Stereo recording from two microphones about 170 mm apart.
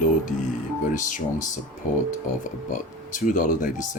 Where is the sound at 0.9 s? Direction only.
50° left (ahead or behind).